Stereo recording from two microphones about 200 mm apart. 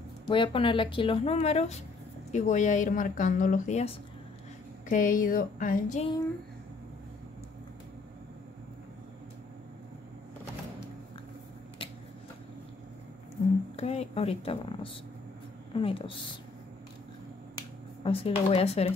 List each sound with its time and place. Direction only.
0.3 s speech: 25° left (ahead or behind)
13.7 s speech: 30° left (ahead or behind)
18.0 s speech: 30° left (ahead or behind)